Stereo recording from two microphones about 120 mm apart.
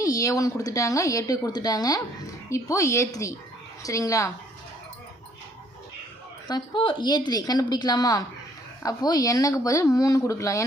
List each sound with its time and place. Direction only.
0.0 s a woman's voice: 30° left (ahead or behind)
6.5 s a woman's voice: 40° left (ahead or behind); by 10.7 s 25° left (ahead or behind)